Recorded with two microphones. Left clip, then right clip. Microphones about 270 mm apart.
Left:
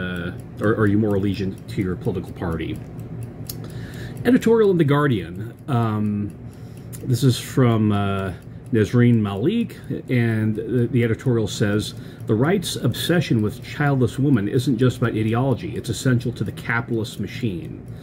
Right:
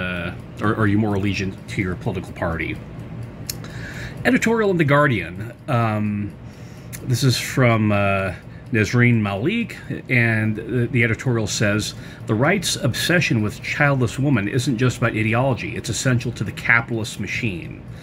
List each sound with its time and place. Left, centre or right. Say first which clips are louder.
0.6 s speech: left 1 dB; centre
4.2 s speech: left 2 dB; centre
7.1 s speech: right 1 dB; centre